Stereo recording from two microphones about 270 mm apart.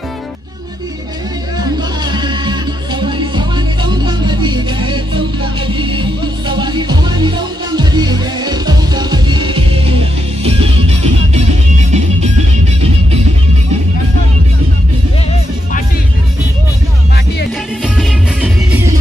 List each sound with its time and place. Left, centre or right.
1.6 s music: centre
17.8 s music: centre